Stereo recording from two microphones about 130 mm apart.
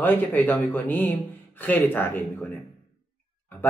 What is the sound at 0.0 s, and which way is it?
Speech, 15° left (ahead or behind).